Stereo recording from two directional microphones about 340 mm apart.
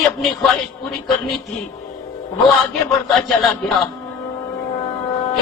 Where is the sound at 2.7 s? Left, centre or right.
Centre.